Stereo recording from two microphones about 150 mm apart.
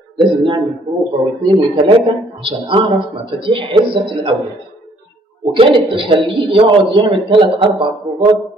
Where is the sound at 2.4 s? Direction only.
35° right (ahead or behind).